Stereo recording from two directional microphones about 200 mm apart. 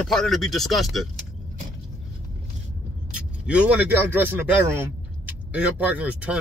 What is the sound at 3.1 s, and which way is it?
A man's voice, 5° right (ahead or behind).